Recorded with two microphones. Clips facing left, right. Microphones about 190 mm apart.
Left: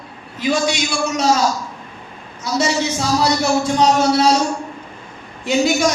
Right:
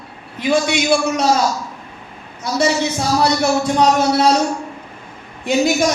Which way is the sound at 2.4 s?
55° right (ahead or behind).